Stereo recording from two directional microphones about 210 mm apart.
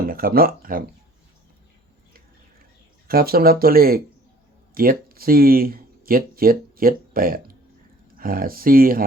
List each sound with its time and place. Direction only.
0.1 s speech: 45° right (ahead or behind)
3.1 s speech: 45° right (ahead or behind)